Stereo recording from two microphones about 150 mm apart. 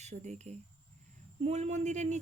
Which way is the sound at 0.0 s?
50° right (ahead or behind).